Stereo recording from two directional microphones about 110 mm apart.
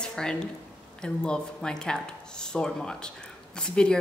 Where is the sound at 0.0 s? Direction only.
5° left (ahead or behind).